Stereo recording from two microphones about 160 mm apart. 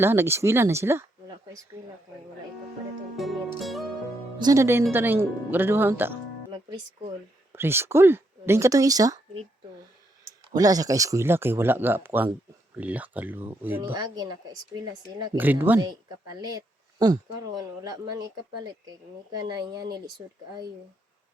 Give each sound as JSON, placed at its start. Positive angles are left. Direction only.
{"t": 0.0, "sound": "speech", "side_deg": -15}
{"t": 3.2, "sound": "music", "side_deg": 0}
{"t": 4.4, "sound": "speech", "side_deg": -20}
{"t": 7.5, "sound": "speech", "side_deg": -15}
{"t": 10.5, "sound": "speech", "side_deg": -25}
{"t": 13.9, "sound": "speech", "side_deg": -25}
{"t": 15.4, "sound": "speech", "side_deg": -10}
{"t": 15.8, "sound": "speech", "side_deg": -25}